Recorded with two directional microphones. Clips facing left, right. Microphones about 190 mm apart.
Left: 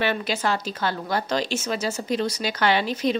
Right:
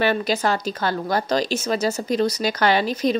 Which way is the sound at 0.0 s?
40° right (ahead or behind).